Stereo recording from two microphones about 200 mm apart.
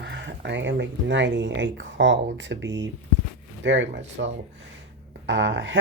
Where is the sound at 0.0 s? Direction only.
60° right (ahead or behind).